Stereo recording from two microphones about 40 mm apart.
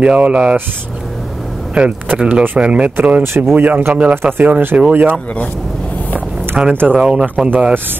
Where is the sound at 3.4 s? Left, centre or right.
Right.